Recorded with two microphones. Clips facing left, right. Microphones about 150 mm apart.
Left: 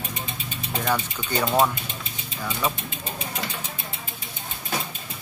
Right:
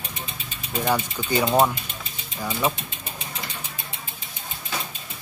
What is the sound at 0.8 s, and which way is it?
Speech, 10° right (ahead or behind).